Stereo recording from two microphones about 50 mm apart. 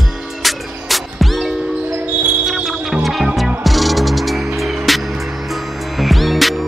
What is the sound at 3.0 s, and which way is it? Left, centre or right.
Music, centre.